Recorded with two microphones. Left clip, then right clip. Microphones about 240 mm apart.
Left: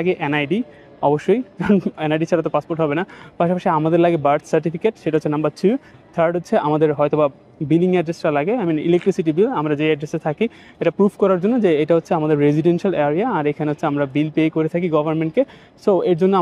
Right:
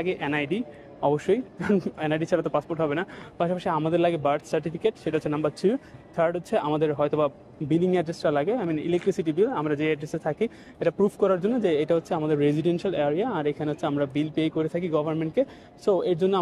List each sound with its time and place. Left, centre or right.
0.0 s speech: left